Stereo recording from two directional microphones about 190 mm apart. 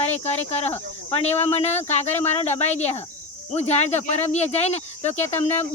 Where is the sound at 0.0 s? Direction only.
35° left (ahead or behind).